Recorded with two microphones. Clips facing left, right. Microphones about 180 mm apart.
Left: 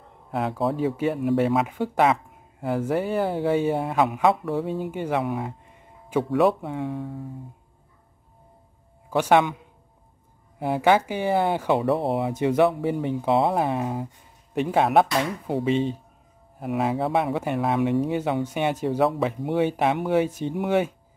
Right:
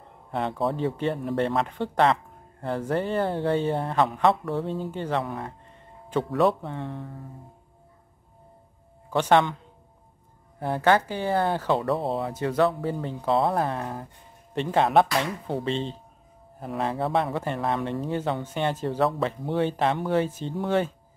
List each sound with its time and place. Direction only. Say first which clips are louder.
0.3 s speech: left 2 dB; centre (ahead or behind)
9.1 s speech: left 1 dB; 5° left (ahead or behind)
10.6 s speech: left 2 dB; 10° left (ahead or behind)
11.8 s speech: left 3 dB; centre (ahead or behind)
12.1 s speech: left 4 dB; 15° left (ahead or behind)